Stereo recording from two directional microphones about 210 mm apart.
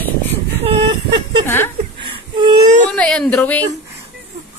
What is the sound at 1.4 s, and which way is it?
Speech, 10° left (ahead or behind).